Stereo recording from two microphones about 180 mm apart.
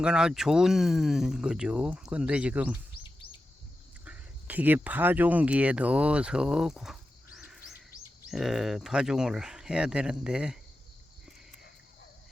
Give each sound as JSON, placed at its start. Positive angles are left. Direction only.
{"t": 0.0, "sound": "speech", "side_deg": -5}
{"t": 2.9, "sound": "chirp", "side_deg": 30}
{"t": 4.0, "sound": "speech", "side_deg": -10}